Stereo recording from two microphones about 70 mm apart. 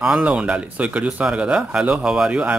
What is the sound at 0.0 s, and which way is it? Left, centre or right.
Speech, centre.